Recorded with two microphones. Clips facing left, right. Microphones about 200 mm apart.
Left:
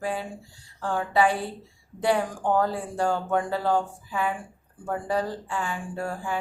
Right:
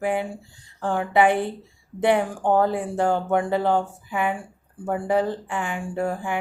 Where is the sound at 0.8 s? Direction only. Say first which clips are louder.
Right 3 dB; 15° right (ahead or behind).